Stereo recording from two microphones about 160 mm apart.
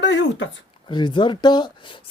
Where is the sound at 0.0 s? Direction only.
90° left.